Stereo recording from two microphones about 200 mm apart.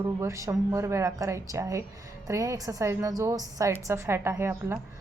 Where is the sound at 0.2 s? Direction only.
15° right (ahead or behind).